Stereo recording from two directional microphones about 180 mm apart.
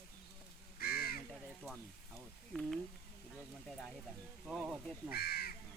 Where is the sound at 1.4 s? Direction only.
10° right (ahead or behind).